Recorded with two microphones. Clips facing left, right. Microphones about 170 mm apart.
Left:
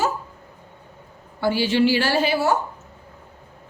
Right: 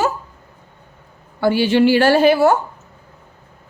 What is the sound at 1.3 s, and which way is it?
A woman's voice, 60° right (ahead or behind).